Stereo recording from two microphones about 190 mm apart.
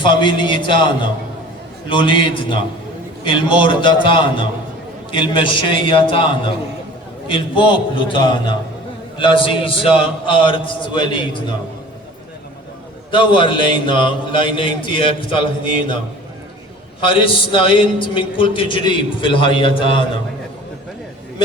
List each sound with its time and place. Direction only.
0.0 s a man's voice: 25° left (ahead or behind)
1.9 s a man's voice: 25° left (ahead or behind)
3.2 s a man's voice: 25° left (ahead or behind)
13.1 s a man's voice: 25° left (ahead or behind)
17.2 s a man's voice: 25° left (ahead or behind)